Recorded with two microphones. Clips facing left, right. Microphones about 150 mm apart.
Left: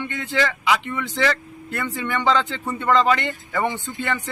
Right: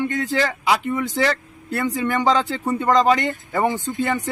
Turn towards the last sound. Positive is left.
turn(degrees=-40)  # may be behind; listen again after turning